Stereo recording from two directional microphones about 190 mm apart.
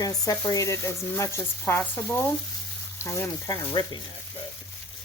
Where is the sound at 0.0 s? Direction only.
20° left (ahead or behind).